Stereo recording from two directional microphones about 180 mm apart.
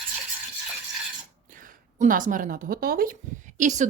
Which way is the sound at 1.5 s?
50° right (ahead or behind).